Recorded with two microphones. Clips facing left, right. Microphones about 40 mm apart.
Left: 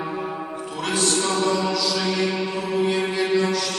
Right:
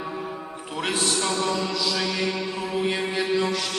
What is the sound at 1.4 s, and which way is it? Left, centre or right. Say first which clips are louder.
Music: left 4 dB; centre.